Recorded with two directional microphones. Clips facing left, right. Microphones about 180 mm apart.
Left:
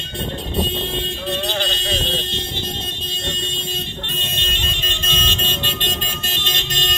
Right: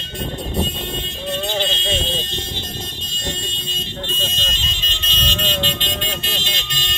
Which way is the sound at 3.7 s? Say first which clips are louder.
Even; 65° left (ahead or behind).